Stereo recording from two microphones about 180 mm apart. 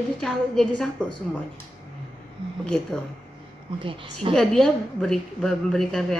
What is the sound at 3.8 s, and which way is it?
Speech, 30° right (ahead or behind).